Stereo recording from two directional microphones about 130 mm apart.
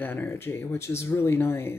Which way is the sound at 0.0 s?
15° left (ahead or behind).